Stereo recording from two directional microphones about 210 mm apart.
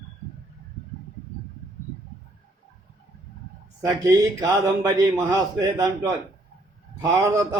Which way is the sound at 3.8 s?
20° right (ahead or behind).